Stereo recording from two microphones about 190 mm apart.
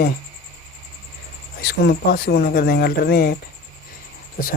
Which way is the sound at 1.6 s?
55° left (ahead or behind).